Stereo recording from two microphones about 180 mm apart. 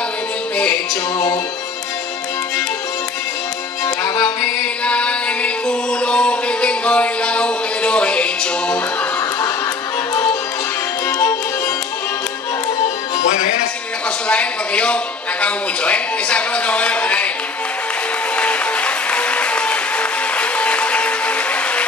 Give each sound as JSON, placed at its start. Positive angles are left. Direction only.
{"t": 3.8, "sound": "music", "side_deg": 15}
{"t": 11.1, "sound": "music", "side_deg": 15}
{"t": 12.8, "sound": "music", "side_deg": 40}
{"t": 14.2, "sound": "a man's voice", "side_deg": 5}
{"t": 18.3, "sound": "music", "side_deg": 5}